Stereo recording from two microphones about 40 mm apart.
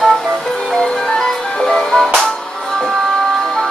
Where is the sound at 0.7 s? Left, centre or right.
Left.